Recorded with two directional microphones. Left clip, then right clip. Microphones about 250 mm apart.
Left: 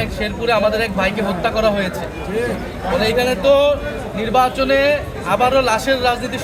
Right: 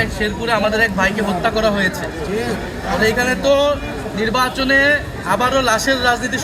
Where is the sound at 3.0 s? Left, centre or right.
Centre.